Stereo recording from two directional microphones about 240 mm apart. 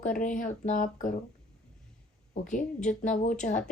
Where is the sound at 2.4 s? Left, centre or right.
Left.